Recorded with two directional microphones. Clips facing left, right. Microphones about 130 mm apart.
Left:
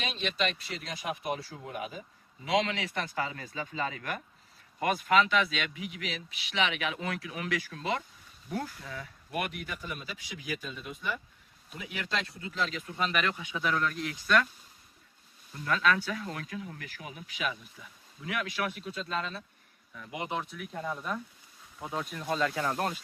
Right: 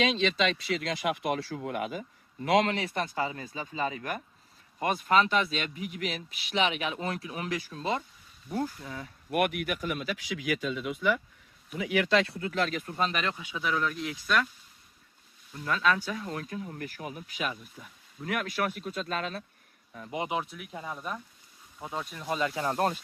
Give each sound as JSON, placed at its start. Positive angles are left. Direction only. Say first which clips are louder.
{"t": 0.0, "sound": "speech", "louder": "right 6 dB", "side_deg": -90}
{"t": 3.2, "sound": "speech", "louder": "right 2 dB", "side_deg": -20}
{"t": 4.8, "sound": "speech", "louder": "right 1 dB", "side_deg": -35}
{"t": 9.3, "sound": "speech", "louder": "right 7 dB", "side_deg": -60}
{"t": 13.0, "sound": "speech", "louder": "even", "side_deg": -30}
{"t": 13.6, "sound": "speech", "louder": "even", "side_deg": -5}
{"t": 15.6, "sound": "speech", "louder": "even", "side_deg": -20}
{"t": 16.3, "sound": "speech", "louder": "right 3 dB", "side_deg": -35}
{"t": 16.8, "sound": "speech", "louder": "right 6 dB", "side_deg": -45}
{"t": 19.9, "sound": "speech", "louder": "right 4 dB", "side_deg": -35}
{"t": 20.3, "sound": "speech", "louder": "right 2 dB", "side_deg": -5}